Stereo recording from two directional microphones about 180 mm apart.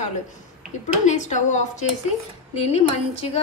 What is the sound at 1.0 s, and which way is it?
A woman's voice, 45° left (ahead or behind).